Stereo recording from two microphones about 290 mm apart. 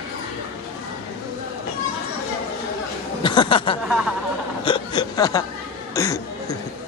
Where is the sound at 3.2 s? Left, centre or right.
Centre.